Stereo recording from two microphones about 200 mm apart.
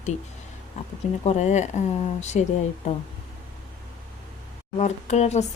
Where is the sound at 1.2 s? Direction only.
35° left (ahead or behind).